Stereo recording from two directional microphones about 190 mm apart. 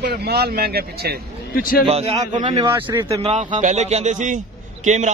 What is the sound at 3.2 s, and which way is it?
A man's voice, 35° right (ahead or behind).